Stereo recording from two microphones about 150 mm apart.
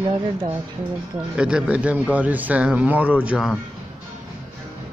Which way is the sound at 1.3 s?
5° right (ahead or behind).